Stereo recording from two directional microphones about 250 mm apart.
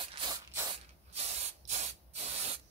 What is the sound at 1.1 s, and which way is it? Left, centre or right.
Spray, right.